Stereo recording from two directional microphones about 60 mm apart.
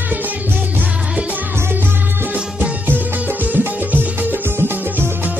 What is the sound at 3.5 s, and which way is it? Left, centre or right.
Music, right.